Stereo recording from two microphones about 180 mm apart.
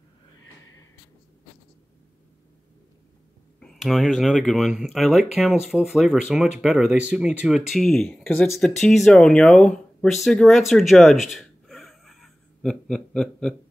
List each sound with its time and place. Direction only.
3.5 s speech: centre (ahead or behind)
11.3 s gasp: centre (ahead or behind)